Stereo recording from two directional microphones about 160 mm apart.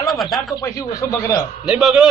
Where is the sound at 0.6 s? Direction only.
20° left (ahead or behind).